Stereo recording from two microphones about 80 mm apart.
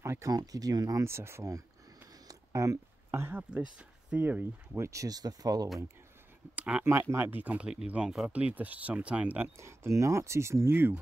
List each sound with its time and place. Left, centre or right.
0.0 s speech: right
0.3 s speech: right
1.0 s speech: right
2.2 s a sound: right
3.1 s speech: right
3.5 s speech: centre; by 5.7 s right
6.5 s speech: centre
6.8 s speech: right
9.6 s speech: right